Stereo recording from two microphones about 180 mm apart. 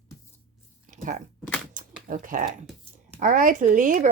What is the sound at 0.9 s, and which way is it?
Speech, 45° right (ahead or behind).